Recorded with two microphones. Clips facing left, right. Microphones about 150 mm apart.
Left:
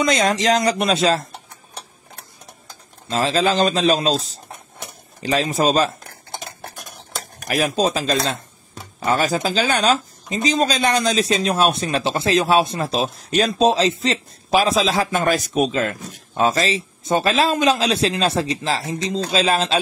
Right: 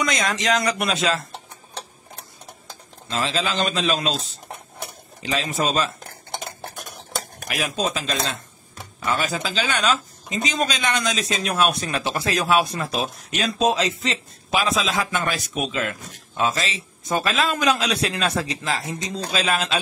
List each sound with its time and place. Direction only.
0.0 s speech: 35° left (ahead or behind)
3.1 s speech: 40° left (ahead or behind)
7.4 s a man's voice: 40° left (ahead or behind)